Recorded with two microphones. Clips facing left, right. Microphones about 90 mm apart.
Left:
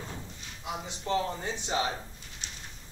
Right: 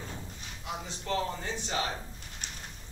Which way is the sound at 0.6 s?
20° left (ahead or behind).